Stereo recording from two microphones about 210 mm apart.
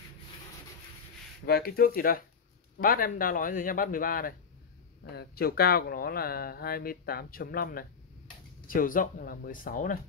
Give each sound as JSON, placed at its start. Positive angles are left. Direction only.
{"t": 1.4, "sound": "speech", "side_deg": 45}